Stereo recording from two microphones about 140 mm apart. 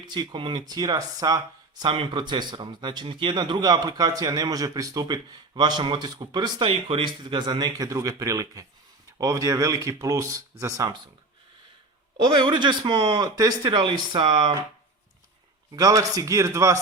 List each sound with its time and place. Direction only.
0.0 s a man's voice: 30° right (ahead or behind)
12.1 s a man's voice: 35° right (ahead or behind)
15.7 s speech: 25° right (ahead or behind)